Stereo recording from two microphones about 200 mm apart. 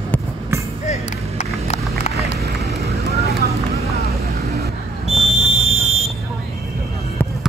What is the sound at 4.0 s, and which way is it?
Vehicle, 50° right (ahead or behind).